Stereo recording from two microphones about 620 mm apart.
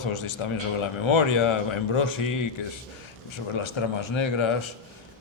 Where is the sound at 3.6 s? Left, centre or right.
Left.